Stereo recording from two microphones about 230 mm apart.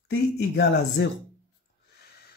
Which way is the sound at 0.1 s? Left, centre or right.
Left.